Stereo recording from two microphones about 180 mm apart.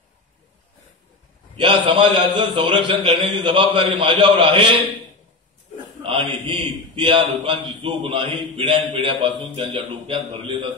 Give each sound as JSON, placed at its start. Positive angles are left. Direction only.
{"t": 1.6, "sound": "a man's voice", "side_deg": -25}
{"t": 6.0, "sound": "a man's voice", "side_deg": -30}